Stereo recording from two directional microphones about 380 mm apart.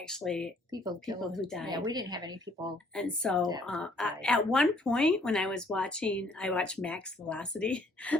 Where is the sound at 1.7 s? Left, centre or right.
Centre.